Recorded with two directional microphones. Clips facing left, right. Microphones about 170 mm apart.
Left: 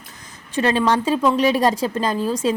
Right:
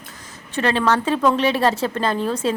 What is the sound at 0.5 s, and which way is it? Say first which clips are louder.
A child's voice: left 1 dB; 15° left (ahead or behind).